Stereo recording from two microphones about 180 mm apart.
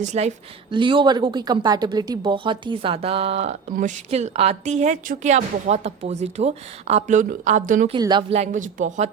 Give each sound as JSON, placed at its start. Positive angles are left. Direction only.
{"t": 0.0, "sound": "a woman's voice", "side_deg": -40}
{"t": 0.7, "sound": "a woman's voice", "side_deg": -25}
{"t": 7.9, "sound": "a woman's voice", "side_deg": -25}
{"t": 8.4, "sound": "speech", "side_deg": -45}